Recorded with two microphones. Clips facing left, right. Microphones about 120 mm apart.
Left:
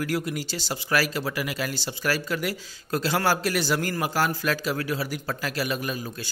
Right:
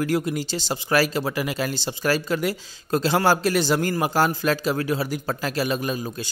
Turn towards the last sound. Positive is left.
turn(degrees=-25)  # may be behind; listen again after turning